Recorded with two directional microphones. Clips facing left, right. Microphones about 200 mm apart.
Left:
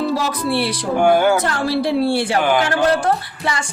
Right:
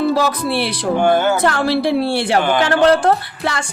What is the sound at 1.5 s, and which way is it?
Speech, 65° right (ahead or behind).